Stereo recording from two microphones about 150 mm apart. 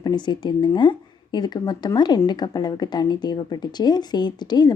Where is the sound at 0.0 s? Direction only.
30° left (ahead or behind).